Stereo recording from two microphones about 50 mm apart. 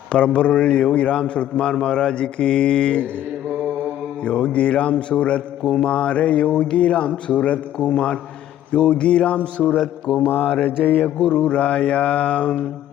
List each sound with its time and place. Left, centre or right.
0.1 s a man's voice: left
4.2 s a man's voice: left